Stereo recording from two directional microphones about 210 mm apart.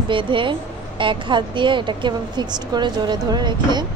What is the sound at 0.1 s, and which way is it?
A woman's voice, 25° right (ahead or behind).